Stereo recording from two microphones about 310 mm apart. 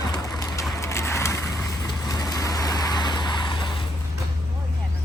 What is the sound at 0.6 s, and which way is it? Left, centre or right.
Vehicle, centre.